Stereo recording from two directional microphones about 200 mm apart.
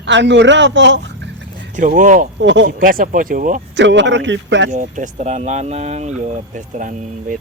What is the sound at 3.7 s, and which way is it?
Speech, 65° right (ahead or behind).